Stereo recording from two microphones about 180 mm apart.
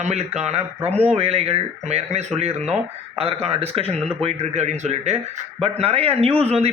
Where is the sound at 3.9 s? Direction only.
35° right (ahead or behind).